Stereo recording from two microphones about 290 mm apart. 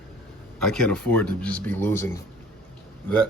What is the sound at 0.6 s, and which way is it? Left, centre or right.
Speech, centre.